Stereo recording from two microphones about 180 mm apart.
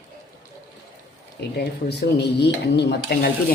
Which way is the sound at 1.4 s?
65° left (ahead or behind).